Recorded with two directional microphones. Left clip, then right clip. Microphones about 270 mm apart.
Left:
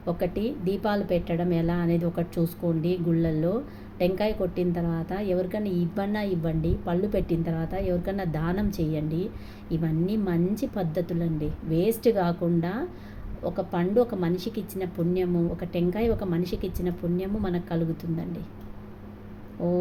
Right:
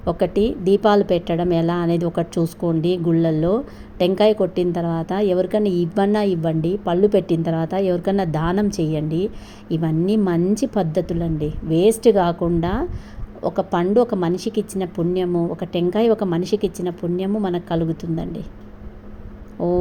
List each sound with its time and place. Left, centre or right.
0.0 s a woman's voice: right
19.6 s a woman's voice: right